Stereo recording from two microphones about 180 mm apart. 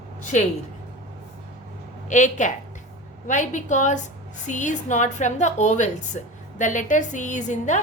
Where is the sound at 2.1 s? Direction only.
45° left (ahead or behind).